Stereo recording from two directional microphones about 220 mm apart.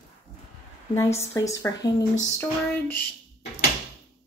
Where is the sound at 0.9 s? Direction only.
10° left (ahead or behind).